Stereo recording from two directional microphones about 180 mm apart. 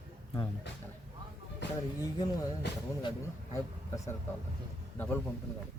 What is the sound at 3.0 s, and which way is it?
Speech, 20° left (ahead or behind).